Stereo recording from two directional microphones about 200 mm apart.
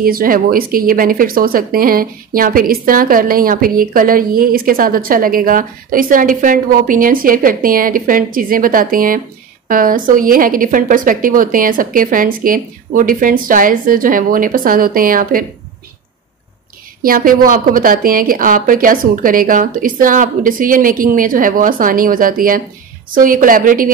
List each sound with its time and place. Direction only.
0.0 s speech: 45° right (ahead or behind)
17.0 s speech: 45° right (ahead or behind)